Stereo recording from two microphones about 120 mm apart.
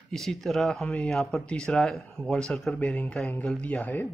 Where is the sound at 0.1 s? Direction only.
5° left (ahead or behind).